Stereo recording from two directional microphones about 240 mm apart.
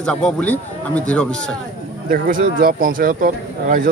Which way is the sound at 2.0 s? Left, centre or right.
Right.